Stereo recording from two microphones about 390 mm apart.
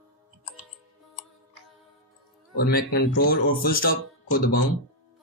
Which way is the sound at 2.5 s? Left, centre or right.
Left.